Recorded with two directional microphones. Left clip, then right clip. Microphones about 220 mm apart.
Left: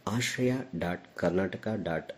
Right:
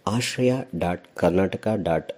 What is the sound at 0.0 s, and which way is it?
Speech, 25° right (ahead or behind).